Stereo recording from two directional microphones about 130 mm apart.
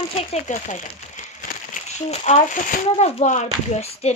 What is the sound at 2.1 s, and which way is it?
Speech, 60° left (ahead or behind).